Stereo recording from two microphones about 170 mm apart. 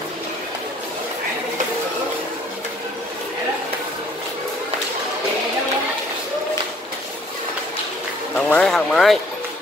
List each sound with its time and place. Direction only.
8.4 s speech: 5° left (ahead or behind)